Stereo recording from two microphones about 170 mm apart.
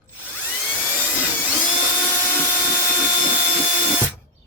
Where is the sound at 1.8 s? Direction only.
10° left (ahead or behind).